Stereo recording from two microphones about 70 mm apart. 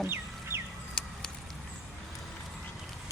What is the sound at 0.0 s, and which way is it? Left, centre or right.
Chicken, right.